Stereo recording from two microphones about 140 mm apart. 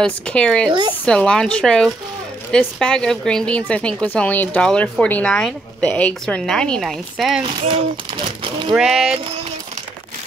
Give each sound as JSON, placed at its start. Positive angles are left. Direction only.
{"t": 0.0, "sound": "a woman's voice", "side_deg": 5}
{"t": 0.7, "sound": "speech", "side_deg": -30}
{"t": 1.0, "sound": "a woman's voice", "side_deg": 5}
{"t": 8.7, "sound": "speech", "side_deg": -5}